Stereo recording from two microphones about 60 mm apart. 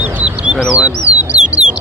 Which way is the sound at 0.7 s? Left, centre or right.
Right.